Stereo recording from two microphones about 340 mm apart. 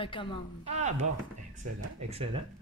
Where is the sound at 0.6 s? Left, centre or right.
Centre.